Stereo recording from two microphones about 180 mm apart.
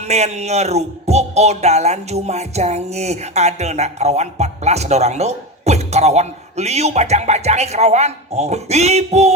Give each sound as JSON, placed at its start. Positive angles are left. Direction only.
{"t": 0.1, "sound": "speech", "side_deg": -35}